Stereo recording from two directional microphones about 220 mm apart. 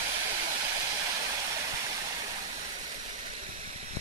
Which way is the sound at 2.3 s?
35° right (ahead or behind).